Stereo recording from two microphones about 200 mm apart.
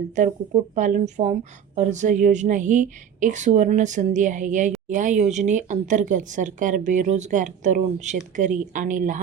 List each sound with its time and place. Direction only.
0.2 s speech: 35° right (ahead or behind)